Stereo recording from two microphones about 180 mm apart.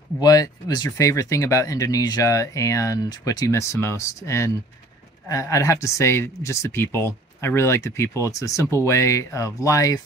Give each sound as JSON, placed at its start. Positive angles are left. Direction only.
{"t": 0.2, "sound": "speech", "side_deg": 20}